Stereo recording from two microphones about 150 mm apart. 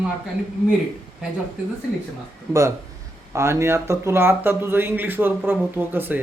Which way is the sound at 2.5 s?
20° right (ahead or behind).